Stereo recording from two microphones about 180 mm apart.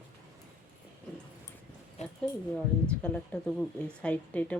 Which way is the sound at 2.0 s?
40° left (ahead or behind).